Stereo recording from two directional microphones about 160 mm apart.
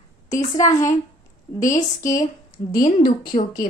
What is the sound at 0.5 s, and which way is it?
Speech, 20° left (ahead or behind).